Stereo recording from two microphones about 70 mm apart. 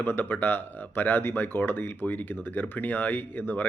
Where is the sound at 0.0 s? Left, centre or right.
Left.